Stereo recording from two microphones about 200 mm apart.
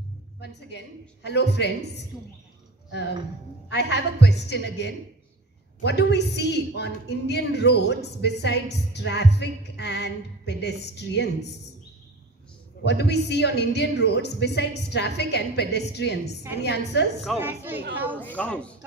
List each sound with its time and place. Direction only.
0.4 s a woman's voice: 55° left (ahead or behind)
3.6 s a woman's voice: 55° left (ahead or behind)
12.8 s a woman's voice: 55° left (ahead or behind)
17.2 s a woman's voice: centre (ahead or behind)
18.2 s speech: 5° left (ahead or behind)